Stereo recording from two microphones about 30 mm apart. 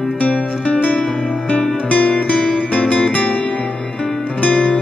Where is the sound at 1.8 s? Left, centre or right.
Left.